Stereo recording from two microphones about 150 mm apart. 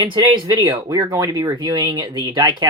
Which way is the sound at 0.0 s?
30° right (ahead or behind).